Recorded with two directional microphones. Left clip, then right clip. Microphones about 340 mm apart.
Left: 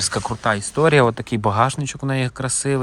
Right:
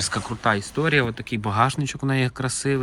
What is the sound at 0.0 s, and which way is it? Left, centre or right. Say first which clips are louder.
Speech: left 2 dB; centre.